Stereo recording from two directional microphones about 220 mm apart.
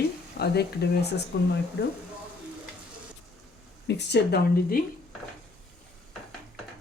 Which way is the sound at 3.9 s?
50° left (ahead or behind).